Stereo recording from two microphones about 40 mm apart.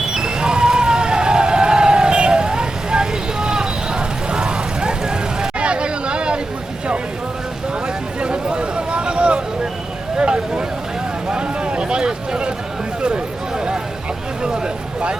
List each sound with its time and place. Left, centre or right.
0.1 s vehicle: centre
5.5 s hubbub: right
8.2 s a sound: right